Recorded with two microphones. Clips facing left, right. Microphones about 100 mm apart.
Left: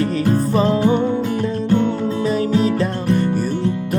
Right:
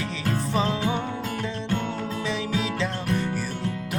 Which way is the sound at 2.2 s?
45° left (ahead or behind).